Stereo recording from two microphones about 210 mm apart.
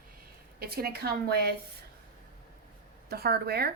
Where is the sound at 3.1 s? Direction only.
50° right (ahead or behind).